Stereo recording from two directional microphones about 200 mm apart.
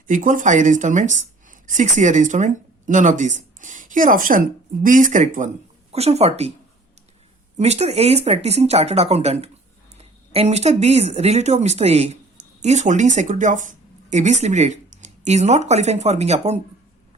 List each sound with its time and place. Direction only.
0.1 s a woman's voice: 40° right (ahead or behind)
7.6 s speech: 30° right (ahead or behind)